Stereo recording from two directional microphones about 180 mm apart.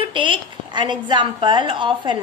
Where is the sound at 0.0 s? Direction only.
30° right (ahead or behind).